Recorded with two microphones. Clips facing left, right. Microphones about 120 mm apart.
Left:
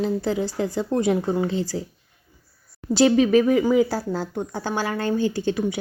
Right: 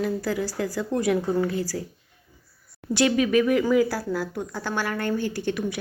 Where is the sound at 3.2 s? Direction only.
30° left (ahead or behind).